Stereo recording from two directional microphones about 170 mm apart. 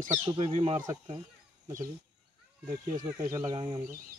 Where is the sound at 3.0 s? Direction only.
20° right (ahead or behind).